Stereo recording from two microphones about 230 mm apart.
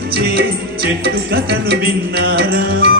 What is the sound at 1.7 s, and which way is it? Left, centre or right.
Music, right.